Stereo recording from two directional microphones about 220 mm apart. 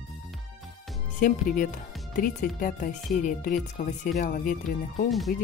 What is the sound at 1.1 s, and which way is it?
Speech, 40° left (ahead or behind).